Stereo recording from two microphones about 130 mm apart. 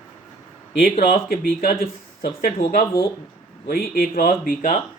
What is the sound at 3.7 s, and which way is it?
Speech, 90° left.